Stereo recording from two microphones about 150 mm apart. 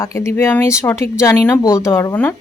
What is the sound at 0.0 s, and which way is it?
Speech, 20° left (ahead or behind).